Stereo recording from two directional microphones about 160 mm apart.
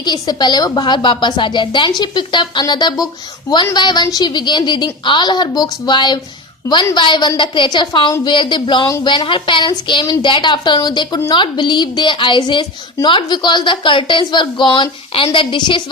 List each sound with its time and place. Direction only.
0.0 s a woman's voice: 25° left (ahead or behind)